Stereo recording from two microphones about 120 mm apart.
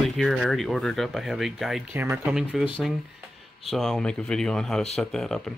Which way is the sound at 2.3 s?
5° right (ahead or behind).